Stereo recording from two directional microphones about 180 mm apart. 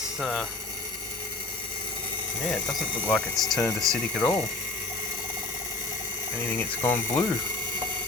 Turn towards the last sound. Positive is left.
turn(degrees=10)  # may be behind; listen again after turning